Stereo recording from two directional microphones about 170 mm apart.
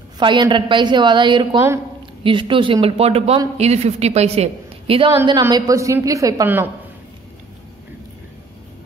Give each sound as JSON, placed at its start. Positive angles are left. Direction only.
{"t": 0.2, "sound": "a woman's voice", "side_deg": -30}
{"t": 5.4, "sound": "a woman's voice", "side_deg": -20}